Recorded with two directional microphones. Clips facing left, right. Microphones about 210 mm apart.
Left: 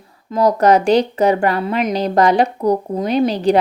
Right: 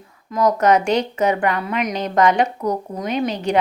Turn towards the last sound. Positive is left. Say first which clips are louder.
# left 6 dB
turn(degrees=35)  # may be behind; listen again after turning